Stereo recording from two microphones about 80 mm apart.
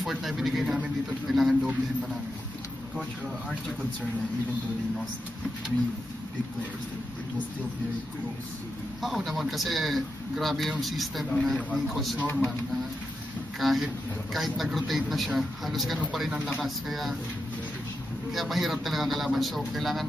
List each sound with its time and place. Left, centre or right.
0.0 s a man's voice: centre
9.0 s a man's voice: centre
12.2 s speech: left
13.6 s a man's voice: centre
18.3 s a man's voice: centre